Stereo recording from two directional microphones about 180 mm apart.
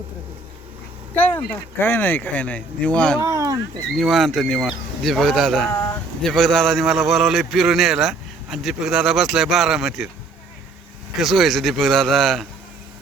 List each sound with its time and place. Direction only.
1.1 s speech: 10° left (ahead or behind)
3.2 s a sound: 15° right (ahead or behind)
3.9 s a man's voice: centre (ahead or behind)
11.2 s a man's voice: centre (ahead or behind)